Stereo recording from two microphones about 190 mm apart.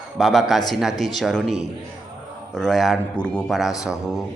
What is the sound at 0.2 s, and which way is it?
Speech, centre (ahead or behind).